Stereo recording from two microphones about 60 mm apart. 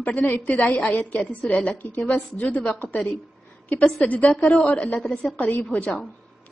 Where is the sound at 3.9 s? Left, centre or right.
Left.